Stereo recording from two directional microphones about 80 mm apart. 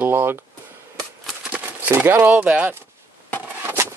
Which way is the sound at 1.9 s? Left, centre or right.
Right.